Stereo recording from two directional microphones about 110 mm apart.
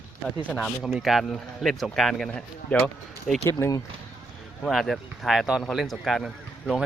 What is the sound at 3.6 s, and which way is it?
Speech, 30° left (ahead or behind).